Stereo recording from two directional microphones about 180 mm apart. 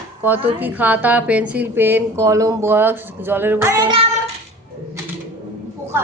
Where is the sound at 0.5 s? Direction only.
10° right (ahead or behind).